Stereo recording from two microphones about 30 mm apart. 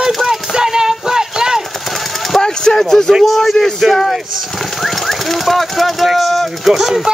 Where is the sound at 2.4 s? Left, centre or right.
Left.